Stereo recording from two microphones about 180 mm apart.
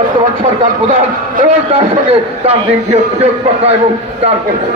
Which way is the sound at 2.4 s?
35° right (ahead or behind).